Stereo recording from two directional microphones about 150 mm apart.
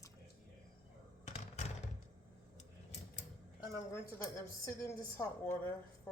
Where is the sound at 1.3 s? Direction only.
45° left (ahead or behind).